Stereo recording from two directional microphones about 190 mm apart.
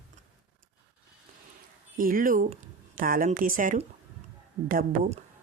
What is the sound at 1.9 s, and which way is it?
Speech, 45° right (ahead or behind).